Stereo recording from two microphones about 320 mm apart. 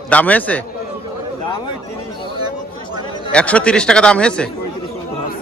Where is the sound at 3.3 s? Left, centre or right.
Centre.